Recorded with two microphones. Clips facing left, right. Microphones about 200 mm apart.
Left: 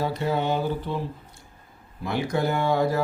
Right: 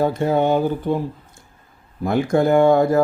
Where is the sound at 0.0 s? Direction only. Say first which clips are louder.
Right 7 dB; 50° right (ahead or behind).